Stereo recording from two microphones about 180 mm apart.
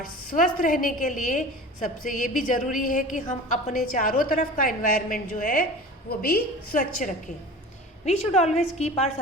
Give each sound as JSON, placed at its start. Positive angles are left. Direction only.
{"t": 0.0, "sound": "a woman's voice", "side_deg": 50}
{"t": 8.0, "sound": "a woman's voice", "side_deg": 35}